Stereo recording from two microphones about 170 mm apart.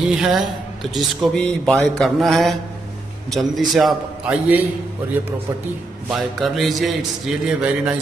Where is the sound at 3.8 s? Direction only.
5° right (ahead or behind).